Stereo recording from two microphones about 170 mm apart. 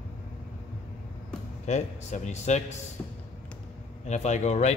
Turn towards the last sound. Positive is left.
turn(degrees=40)  # may be behind; listen again after turning